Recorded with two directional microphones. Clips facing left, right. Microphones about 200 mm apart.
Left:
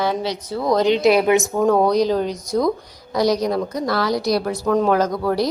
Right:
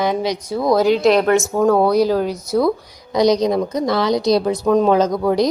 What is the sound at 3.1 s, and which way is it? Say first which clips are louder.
A woman's voice: right 4 dB; 20° right (ahead or behind).